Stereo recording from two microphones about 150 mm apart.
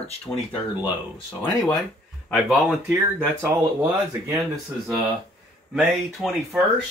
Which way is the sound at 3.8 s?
20° right (ahead or behind).